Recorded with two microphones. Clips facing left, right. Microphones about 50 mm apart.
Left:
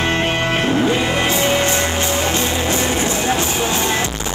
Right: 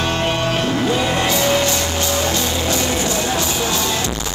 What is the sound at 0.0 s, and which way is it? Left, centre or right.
Music, left.